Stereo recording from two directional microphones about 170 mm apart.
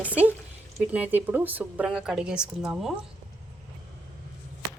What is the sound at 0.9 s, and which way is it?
A woman's voice, 10° right (ahead or behind).